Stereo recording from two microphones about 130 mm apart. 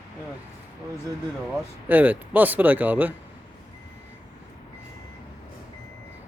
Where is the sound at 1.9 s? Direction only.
15° right (ahead or behind).